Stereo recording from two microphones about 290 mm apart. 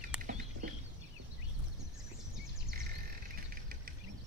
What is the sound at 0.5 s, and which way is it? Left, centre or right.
Chicken, right.